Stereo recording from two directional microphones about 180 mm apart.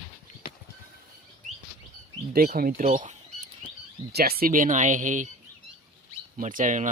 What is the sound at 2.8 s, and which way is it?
Bird, 40° right (ahead or behind).